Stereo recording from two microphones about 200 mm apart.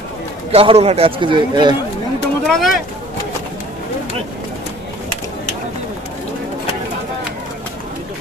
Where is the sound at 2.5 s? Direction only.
Centre (ahead or behind).